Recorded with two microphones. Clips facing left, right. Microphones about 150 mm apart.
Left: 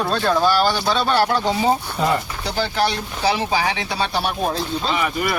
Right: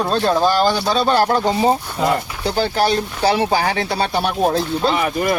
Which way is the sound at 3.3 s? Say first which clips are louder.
Right 3 dB; 55° right (ahead or behind).